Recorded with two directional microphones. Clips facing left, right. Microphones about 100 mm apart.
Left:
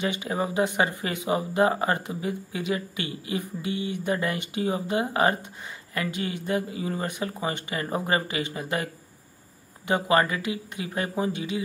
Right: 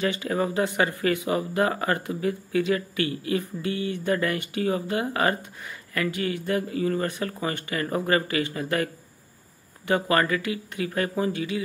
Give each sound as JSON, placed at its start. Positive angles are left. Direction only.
{"t": 0.0, "sound": "speech", "side_deg": 20}